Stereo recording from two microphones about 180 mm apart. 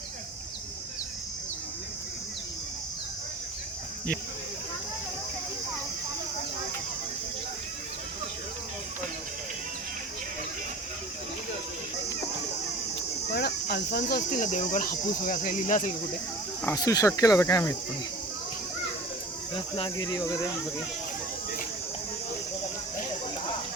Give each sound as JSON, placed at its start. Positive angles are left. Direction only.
{"t": 13.0, "sound": "cricket", "side_deg": 65}
{"t": 14.3, "sound": "speech", "side_deg": 45}
{"t": 16.6, "sound": "speech", "side_deg": 20}
{"t": 19.5, "sound": "speech", "side_deg": 30}